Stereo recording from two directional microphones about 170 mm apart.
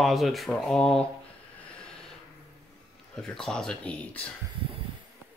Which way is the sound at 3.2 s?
5° left (ahead or behind).